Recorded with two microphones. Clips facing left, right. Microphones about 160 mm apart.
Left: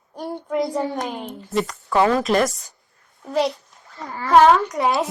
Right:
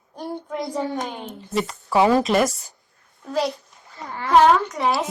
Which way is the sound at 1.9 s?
10° right (ahead or behind).